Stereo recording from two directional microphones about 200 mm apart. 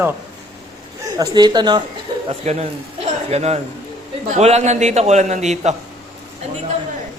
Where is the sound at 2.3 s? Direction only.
30° right (ahead or behind).